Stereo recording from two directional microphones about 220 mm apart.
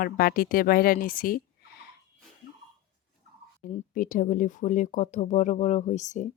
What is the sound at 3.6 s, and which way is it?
Speech, 35° left (ahead or behind).